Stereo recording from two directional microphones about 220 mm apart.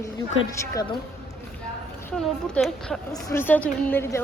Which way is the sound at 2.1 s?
5° left (ahead or behind).